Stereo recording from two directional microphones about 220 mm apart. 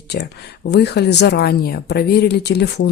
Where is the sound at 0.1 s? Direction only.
45° left (ahead or behind).